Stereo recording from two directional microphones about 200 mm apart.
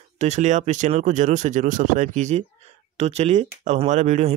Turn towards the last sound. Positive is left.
turn(degrees=-35)  # may be behind; listen again after turning